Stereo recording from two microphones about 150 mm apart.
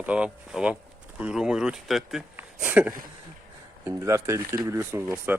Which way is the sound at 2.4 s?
10° right (ahead or behind).